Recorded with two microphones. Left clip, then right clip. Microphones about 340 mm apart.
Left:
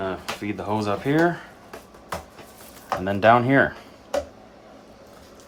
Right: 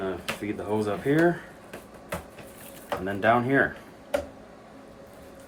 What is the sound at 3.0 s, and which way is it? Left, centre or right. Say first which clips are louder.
Speech: left 6 dB; left.